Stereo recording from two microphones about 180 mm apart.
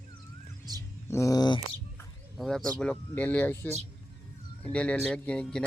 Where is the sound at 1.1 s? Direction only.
20° left (ahead or behind).